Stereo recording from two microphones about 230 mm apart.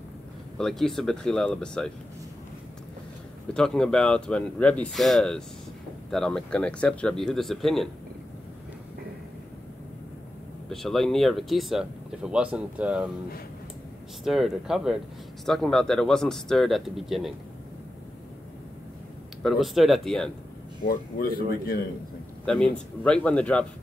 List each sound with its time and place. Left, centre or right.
0.6 s speech: centre
3.5 s speech: centre
10.7 s speech: centre
14.2 s speech: centre
19.4 s speech: centre
20.8 s speech: left
22.4 s speech: centre